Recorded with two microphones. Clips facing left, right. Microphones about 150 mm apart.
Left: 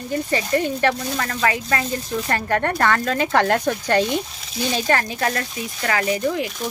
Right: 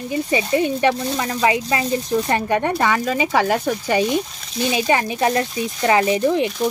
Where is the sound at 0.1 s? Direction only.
10° right (ahead or behind).